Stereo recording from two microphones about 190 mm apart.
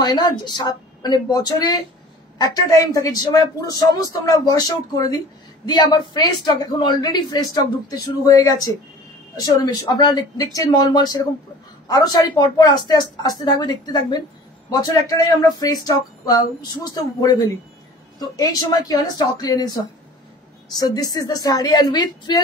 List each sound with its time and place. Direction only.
0.0 s a man's voice: 25° left (ahead or behind)
20.8 s a man's voice: 20° left (ahead or behind)